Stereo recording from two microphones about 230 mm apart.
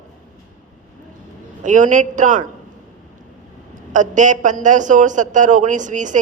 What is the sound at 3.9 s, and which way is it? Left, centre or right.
A man's voice, right.